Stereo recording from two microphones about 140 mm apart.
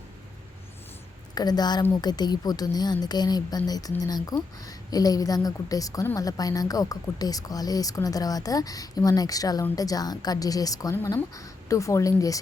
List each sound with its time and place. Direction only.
1.4 s speech: 30° left (ahead or behind)